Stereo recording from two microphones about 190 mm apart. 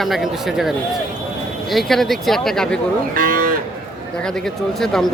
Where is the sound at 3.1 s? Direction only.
45° right (ahead or behind).